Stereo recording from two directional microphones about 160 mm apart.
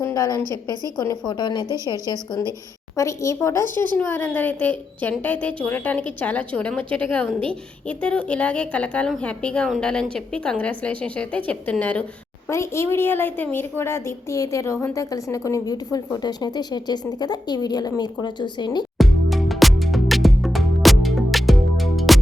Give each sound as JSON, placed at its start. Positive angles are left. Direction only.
{"t": 0.0, "sound": "a woman's voice", "side_deg": 20}
{"t": 18.9, "sound": "music", "side_deg": 0}